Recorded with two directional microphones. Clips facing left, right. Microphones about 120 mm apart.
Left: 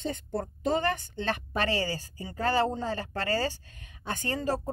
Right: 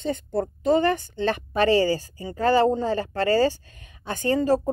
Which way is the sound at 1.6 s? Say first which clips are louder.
Right 12 dB; 35° right (ahead or behind).